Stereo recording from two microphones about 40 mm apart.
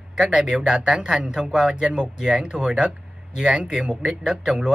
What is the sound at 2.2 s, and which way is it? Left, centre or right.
Speech, right.